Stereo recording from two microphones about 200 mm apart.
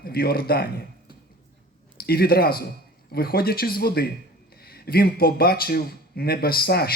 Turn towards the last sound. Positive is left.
turn(degrees=50)  # may be behind; listen again after turning